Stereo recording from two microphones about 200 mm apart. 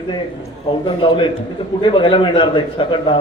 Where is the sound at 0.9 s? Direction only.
25° left (ahead or behind).